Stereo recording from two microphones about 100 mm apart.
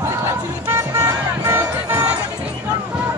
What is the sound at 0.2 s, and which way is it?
Music, 25° right (ahead or behind).